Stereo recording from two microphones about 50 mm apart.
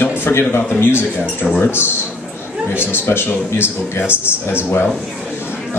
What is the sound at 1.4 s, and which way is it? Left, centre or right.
Speech, left.